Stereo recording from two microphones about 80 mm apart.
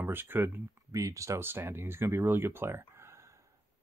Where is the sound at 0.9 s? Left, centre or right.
Right.